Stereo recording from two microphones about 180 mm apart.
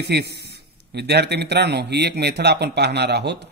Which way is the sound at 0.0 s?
65° right (ahead or behind).